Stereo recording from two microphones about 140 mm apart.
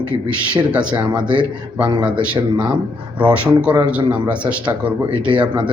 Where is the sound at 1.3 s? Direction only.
35° right (ahead or behind).